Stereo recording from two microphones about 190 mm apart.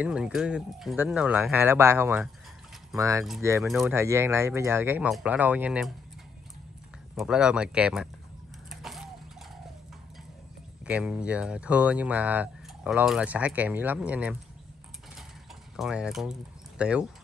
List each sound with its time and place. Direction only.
0.0 s speech: 5° right (ahead or behind)
3.6 s speech: centre (ahead or behind)
3.9 s speech: 15° right (ahead or behind)
7.2 s speech: 5° right (ahead or behind)
8.6 s a sound: centre (ahead or behind)
10.9 s speech: 5° right (ahead or behind)
15.7 s speech: 5° right (ahead or behind)